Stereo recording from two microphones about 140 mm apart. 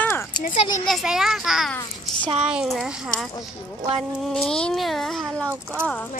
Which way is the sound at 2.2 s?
45° right (ahead or behind).